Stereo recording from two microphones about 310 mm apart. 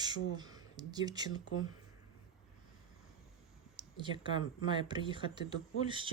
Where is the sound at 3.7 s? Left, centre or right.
Centre.